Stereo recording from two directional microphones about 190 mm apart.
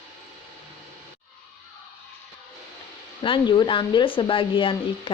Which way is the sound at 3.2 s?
25° left (ahead or behind).